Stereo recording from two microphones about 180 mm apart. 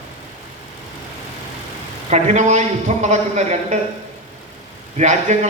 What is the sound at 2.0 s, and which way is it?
A man's voice, 40° right (ahead or behind).